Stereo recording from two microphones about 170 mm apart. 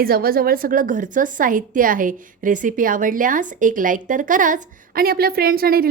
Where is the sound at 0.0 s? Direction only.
60° right (ahead or behind).